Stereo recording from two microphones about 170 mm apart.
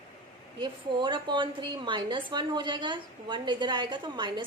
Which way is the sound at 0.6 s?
25° right (ahead or behind).